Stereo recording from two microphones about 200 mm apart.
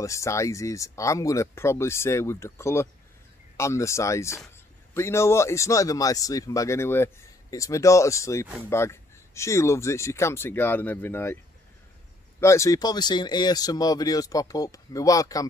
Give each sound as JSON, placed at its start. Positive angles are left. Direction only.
{"t": 0.0, "sound": "speech", "side_deg": 15}
{"t": 12.4, "sound": "speech", "side_deg": 15}